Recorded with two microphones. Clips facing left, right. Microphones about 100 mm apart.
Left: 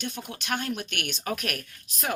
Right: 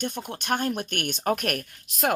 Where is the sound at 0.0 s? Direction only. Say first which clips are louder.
Right 4 dB; 50° right (ahead or behind).